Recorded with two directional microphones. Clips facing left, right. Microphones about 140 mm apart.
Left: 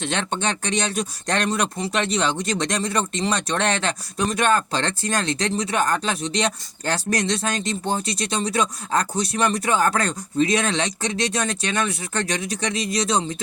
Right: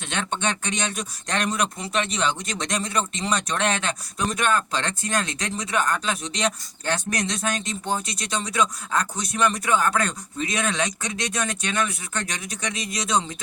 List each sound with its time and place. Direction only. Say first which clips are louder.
0.0 s speech: left 2 dB; 35° left (ahead or behind)